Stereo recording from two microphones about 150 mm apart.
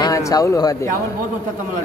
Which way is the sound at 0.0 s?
25° left (ahead or behind).